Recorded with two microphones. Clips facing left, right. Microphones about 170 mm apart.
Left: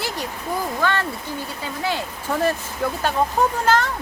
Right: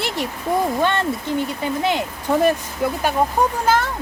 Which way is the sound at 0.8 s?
20° right (ahead or behind).